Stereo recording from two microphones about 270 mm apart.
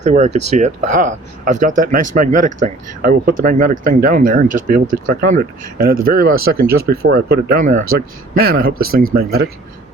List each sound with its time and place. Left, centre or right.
0.0 s speech: right